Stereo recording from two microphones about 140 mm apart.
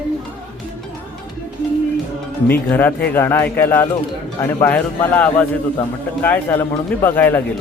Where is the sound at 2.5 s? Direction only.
10° left (ahead or behind).